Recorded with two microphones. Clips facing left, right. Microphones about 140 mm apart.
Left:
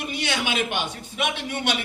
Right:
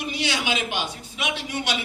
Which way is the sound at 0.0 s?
55° left (ahead or behind).